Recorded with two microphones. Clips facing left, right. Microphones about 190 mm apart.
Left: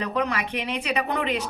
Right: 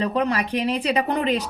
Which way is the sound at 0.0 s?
30° right (ahead or behind).